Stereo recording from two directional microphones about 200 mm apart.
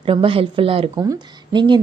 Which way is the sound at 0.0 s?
25° right (ahead or behind).